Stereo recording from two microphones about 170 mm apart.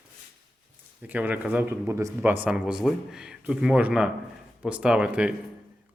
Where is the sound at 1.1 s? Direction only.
10° right (ahead or behind).